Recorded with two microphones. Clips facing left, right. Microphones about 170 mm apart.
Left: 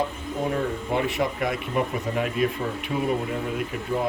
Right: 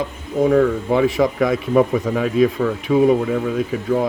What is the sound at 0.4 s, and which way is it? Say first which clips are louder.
Speech: right 12 dB; 90° right.